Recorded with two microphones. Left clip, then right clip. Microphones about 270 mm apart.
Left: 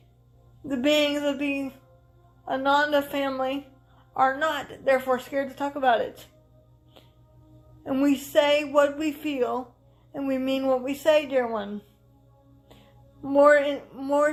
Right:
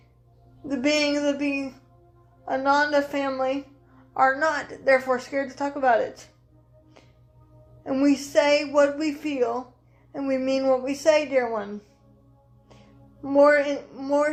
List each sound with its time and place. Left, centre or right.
0.7 s a woman's voice: left
7.9 s a woman's voice: left
13.2 s a woman's voice: left